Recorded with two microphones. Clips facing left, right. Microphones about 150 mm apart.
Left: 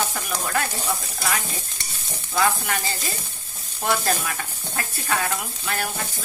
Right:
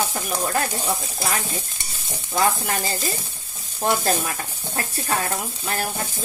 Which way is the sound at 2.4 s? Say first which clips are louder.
Right 1 dB; 40° right (ahead or behind).